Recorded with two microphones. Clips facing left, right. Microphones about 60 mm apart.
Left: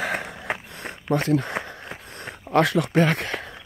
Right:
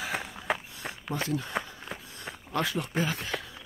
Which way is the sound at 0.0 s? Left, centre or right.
Left.